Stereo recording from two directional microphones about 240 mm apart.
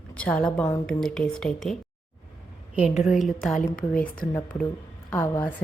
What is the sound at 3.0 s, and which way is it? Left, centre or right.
Speech, centre.